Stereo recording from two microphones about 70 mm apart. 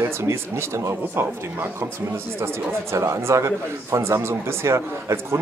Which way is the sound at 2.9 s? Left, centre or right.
Right.